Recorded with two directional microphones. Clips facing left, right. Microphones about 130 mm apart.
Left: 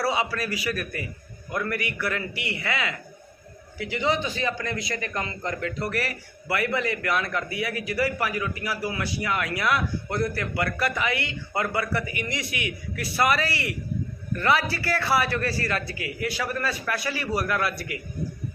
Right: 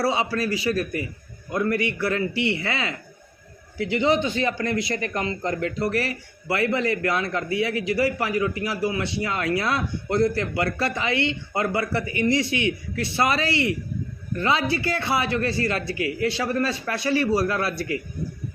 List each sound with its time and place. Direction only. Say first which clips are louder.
0.0 s a man's voice: right 3 dB; 25° right (ahead or behind)